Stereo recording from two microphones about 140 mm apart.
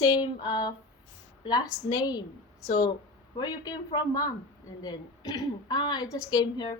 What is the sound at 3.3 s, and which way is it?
A woman's voice, 25° left (ahead or behind).